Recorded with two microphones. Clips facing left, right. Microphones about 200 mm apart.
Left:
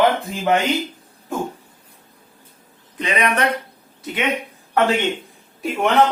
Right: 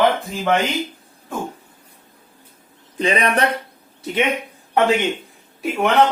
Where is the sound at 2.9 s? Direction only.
30° right (ahead or behind).